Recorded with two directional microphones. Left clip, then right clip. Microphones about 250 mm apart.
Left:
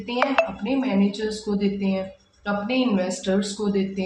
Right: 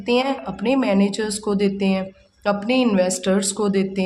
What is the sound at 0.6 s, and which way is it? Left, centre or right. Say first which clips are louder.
Speech: right 5 dB; right.